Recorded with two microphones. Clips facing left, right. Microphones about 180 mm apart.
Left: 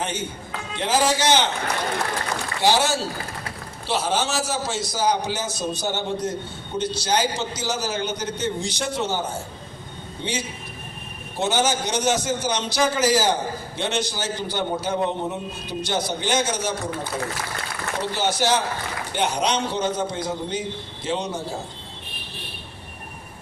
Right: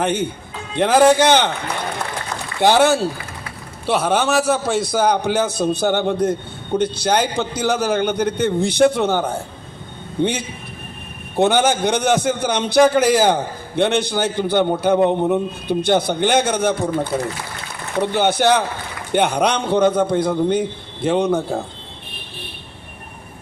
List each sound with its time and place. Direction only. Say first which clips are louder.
0.0 s a man's voice: right 8 dB; 60° right (ahead or behind)